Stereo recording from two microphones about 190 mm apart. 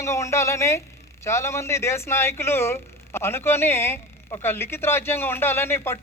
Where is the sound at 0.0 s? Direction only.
15° left (ahead or behind).